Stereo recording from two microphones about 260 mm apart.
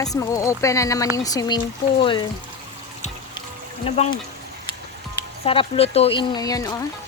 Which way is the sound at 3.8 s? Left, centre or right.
Left.